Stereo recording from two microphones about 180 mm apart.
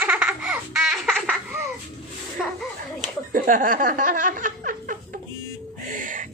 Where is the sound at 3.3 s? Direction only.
50° right (ahead or behind).